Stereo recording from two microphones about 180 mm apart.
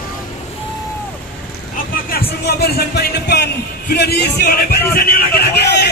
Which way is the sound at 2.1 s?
60° left (ahead or behind).